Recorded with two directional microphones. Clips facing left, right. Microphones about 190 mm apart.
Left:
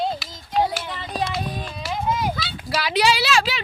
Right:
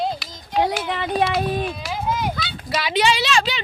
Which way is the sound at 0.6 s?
75° right (ahead or behind).